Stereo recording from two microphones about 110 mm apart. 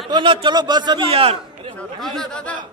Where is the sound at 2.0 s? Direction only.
5° left (ahead or behind).